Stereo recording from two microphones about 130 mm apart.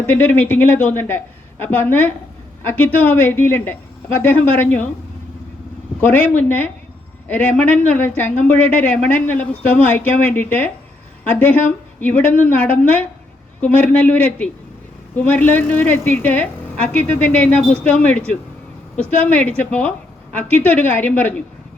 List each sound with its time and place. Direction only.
0.1 s speech: 10° left (ahead or behind)
6.0 s speech: 10° left (ahead or behind)
19.2 s speech: 10° left (ahead or behind)